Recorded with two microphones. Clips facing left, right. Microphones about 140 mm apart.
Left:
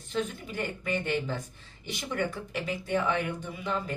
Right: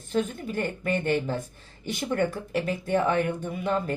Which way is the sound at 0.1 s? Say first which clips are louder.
Right 5 dB; 50° right (ahead or behind).